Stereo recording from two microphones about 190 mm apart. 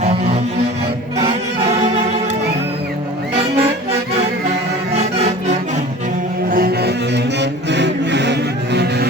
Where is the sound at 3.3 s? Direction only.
30° right (ahead or behind).